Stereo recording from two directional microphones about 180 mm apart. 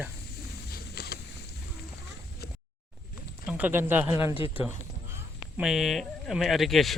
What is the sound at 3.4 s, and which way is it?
Speech, 5° right (ahead or behind).